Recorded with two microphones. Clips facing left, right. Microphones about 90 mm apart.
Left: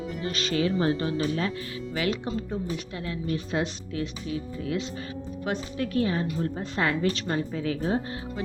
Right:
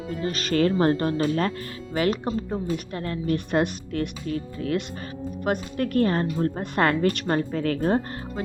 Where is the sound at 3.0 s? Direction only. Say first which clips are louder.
Right 4 dB; 55° right (ahead or behind).